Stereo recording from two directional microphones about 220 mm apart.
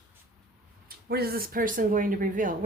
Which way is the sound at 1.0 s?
45° right (ahead or behind).